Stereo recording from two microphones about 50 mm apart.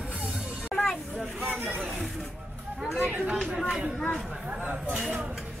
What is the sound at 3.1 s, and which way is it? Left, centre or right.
Chatter, right.